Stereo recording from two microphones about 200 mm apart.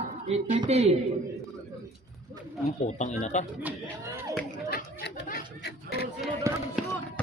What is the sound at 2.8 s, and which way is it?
Speech, 35° left (ahead or behind).